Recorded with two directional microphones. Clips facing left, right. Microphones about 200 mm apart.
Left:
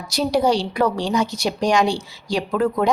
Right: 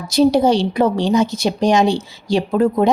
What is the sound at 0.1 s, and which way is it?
A woman's voice, 25° right (ahead or behind).